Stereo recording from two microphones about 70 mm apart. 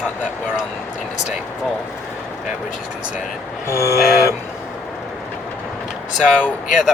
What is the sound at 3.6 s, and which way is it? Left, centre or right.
Vehicle, left.